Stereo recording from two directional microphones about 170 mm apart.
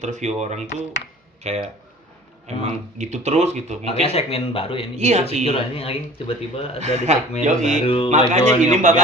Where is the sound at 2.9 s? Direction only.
40° right (ahead or behind).